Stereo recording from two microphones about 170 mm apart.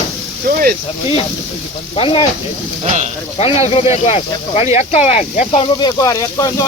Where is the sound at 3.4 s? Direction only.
40° left (ahead or behind).